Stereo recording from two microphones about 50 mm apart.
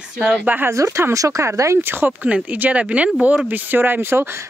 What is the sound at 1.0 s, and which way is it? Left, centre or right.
Speech, right.